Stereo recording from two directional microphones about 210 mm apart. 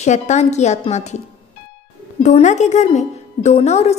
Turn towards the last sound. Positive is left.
turn(degrees=30)  # may be behind; listen again after turning